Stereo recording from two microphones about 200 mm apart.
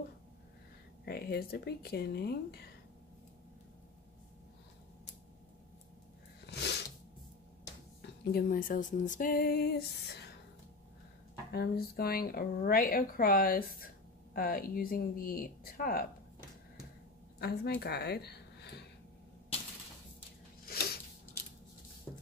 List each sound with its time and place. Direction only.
1.0 s speech: 50° left (ahead or behind)
6.4 s a sound: 55° left (ahead or behind)
8.0 s speech: 50° left (ahead or behind)
11.5 s speech: 50° left (ahead or behind)
17.4 s a woman's voice: 55° left (ahead or behind)
20.6 s a sound: 50° left (ahead or behind)